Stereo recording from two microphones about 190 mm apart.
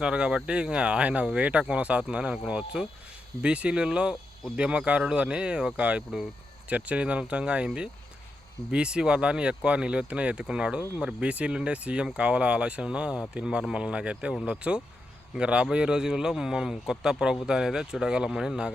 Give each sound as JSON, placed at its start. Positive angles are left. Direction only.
{"t": 0.0, "sound": "speech", "side_deg": -5}